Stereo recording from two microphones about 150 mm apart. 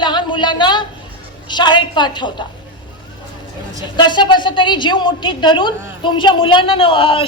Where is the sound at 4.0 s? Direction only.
30° left (ahead or behind).